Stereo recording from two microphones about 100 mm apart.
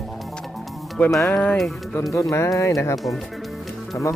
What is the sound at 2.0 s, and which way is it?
Music, 30° left (ahead or behind).